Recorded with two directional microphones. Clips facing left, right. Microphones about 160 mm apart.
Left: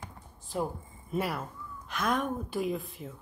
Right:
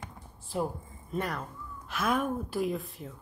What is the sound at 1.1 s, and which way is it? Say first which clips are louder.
A woman's voice: left 1 dB; 5° left (ahead or behind).